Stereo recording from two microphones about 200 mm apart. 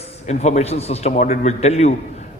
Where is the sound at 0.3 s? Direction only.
35° left (ahead or behind).